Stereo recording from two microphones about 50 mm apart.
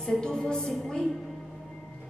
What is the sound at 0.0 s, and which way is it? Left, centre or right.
A woman's voice, centre.